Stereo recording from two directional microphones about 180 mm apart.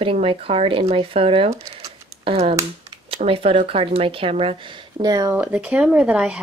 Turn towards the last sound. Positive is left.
turn(degrees=-5)  # may be behind; listen again after turning